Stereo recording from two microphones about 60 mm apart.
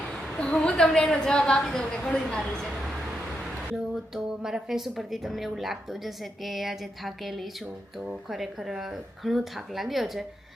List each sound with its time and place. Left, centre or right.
0.3 s a sound: centre
1.2 s a woman's voice: centre
3.8 s speech: centre